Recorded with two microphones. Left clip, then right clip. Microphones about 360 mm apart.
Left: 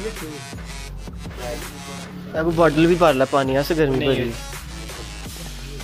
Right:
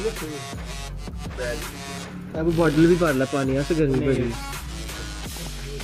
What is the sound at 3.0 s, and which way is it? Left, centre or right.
Speech, left.